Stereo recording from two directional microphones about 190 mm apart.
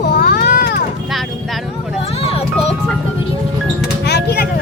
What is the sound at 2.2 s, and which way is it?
Music, 30° left (ahead or behind).